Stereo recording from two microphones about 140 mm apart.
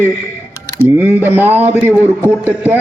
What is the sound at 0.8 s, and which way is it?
Speech, 90° right.